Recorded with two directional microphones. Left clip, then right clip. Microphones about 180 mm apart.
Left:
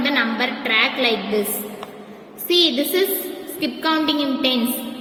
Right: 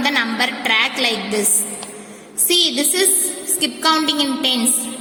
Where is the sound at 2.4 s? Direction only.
10° right (ahead or behind).